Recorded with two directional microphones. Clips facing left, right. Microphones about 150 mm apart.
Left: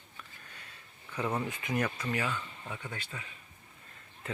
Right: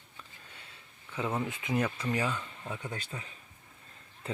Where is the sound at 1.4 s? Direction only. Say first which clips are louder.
Right 2 dB; 20° right (ahead or behind).